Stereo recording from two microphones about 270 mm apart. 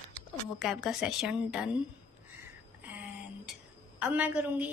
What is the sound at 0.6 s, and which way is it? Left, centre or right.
A woman's voice, centre.